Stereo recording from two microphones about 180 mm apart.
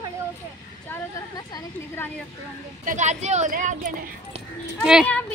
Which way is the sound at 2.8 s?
40° right (ahead or behind).